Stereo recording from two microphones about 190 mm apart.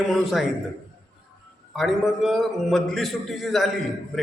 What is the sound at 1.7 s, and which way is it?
A man's voice, centre (ahead or behind).